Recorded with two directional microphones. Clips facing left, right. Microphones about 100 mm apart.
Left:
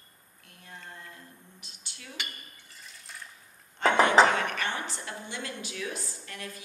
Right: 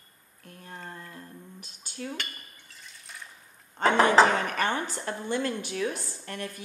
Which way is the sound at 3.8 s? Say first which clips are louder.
Right 1 dB; 40° right (ahead or behind).